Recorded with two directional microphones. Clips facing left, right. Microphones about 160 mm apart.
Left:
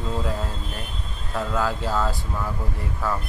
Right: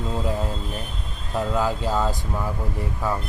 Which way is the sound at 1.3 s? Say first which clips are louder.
Right 2 dB; 15° right (ahead or behind).